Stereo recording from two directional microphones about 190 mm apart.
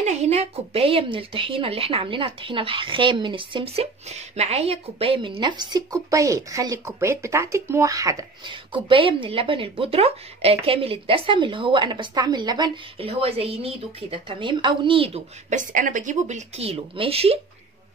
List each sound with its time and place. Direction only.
0.0 s speech: 35° right (ahead or behind)
15.5 s a woman's voice: 45° right (ahead or behind)